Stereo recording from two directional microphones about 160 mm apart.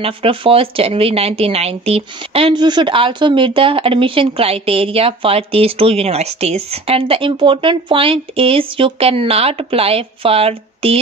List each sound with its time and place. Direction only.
0.0 s a woman's voice: 35° right (ahead or behind)